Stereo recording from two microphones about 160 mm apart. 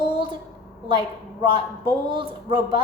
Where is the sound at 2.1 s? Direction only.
30° right (ahead or behind).